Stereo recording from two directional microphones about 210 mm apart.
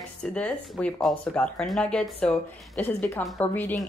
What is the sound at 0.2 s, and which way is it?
Speech, 5° left (ahead or behind).